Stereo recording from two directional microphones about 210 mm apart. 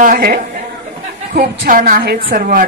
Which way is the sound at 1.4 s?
45° right (ahead or behind).